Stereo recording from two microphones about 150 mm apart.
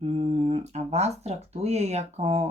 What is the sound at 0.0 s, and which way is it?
Speech, 45° right (ahead or behind).